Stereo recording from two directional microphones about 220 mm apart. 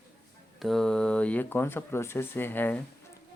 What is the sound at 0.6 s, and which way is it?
Speech, centre (ahead or behind).